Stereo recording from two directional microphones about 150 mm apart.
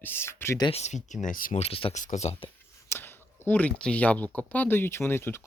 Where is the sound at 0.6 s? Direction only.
45° left (ahead or behind); by 1.5 s 60° left (ahead or behind).